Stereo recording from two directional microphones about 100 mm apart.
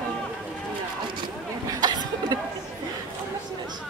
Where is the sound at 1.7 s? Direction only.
45° right (ahead or behind).